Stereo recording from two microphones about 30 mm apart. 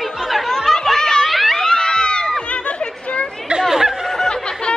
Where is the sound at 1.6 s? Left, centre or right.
Left.